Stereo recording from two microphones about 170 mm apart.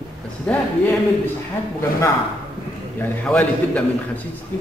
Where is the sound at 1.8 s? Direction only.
15° left (ahead or behind).